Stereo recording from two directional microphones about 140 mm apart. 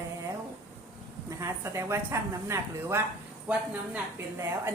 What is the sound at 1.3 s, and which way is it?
A woman's voice, 20° right (ahead or behind).